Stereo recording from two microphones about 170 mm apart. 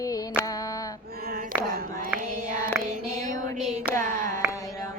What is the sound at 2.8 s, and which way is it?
Music, 10° right (ahead or behind).